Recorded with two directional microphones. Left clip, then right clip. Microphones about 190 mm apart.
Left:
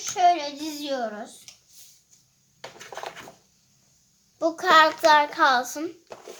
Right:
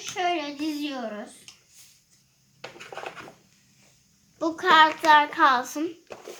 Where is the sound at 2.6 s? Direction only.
15° left (ahead or behind).